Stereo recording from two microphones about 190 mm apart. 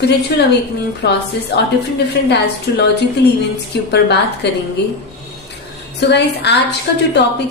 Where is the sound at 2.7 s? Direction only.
60° left (ahead or behind).